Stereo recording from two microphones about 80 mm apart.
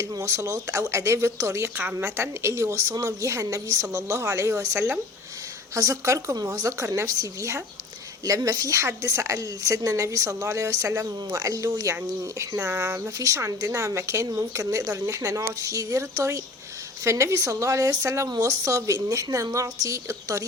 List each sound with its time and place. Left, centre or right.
0.0 s speech: right
8.2 s speech: right